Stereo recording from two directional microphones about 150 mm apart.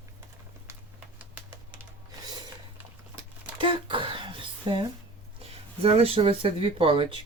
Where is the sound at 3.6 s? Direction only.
35° right (ahead or behind).